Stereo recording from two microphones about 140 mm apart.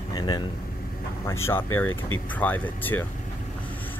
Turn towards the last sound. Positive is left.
turn(degrees=15)  # may be behind; listen again after turning